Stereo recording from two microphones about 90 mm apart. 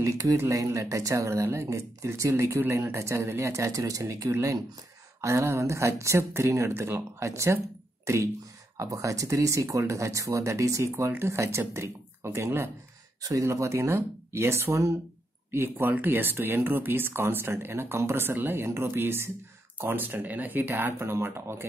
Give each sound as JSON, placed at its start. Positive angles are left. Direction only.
{"t": 0.0, "sound": "speech", "side_deg": -35}